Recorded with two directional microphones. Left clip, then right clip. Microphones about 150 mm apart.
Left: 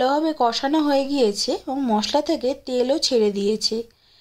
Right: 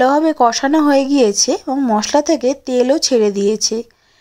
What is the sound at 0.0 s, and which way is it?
Speech, 30° right (ahead or behind).